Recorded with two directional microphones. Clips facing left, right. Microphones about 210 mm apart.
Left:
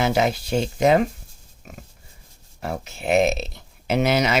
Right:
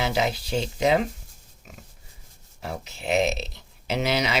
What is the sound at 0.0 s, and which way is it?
Speech, 50° left (ahead or behind).